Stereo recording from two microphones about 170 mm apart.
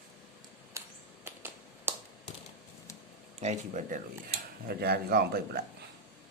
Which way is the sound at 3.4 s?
45° right (ahead or behind).